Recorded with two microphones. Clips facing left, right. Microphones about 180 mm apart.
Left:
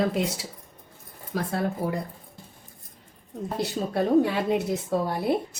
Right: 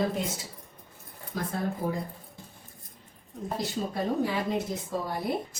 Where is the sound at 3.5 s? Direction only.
70° left (ahead or behind).